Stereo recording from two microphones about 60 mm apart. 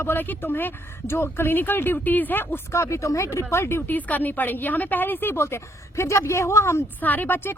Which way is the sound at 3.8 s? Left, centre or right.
Left.